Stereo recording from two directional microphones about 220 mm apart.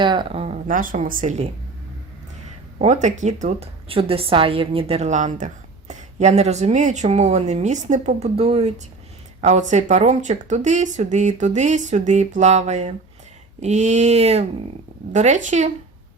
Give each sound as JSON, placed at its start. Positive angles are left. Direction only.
{"t": 0.0, "sound": "speech", "side_deg": -20}
{"t": 2.7, "sound": "a woman's voice", "side_deg": -35}